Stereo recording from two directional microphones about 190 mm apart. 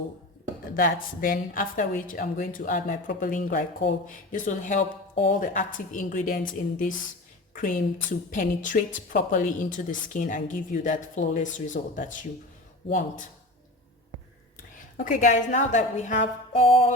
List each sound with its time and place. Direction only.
0.7 s a woman's voice: 50° left (ahead or behind)
14.8 s a woman's voice: 45° left (ahead or behind)